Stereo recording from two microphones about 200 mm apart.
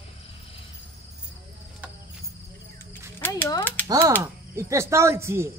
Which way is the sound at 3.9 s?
20° right (ahead or behind).